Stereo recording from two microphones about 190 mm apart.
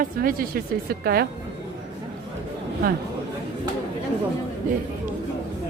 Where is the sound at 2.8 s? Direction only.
50° right (ahead or behind).